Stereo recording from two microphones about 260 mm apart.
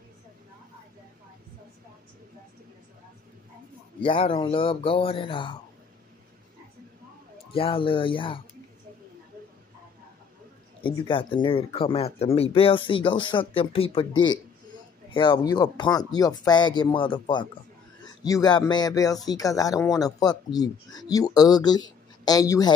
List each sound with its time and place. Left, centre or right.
4.0 s speech: centre
7.5 s speech: left
10.8 s speech: centre
15.0 s speech: centre